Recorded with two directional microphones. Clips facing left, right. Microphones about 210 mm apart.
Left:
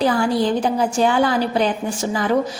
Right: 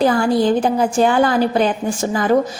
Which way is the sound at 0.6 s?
50° right (ahead or behind).